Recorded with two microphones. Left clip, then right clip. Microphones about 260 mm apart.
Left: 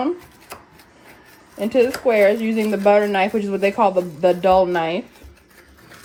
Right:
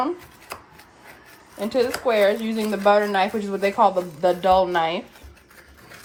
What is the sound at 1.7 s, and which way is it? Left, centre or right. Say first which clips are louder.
Speech: left 4 dB; right.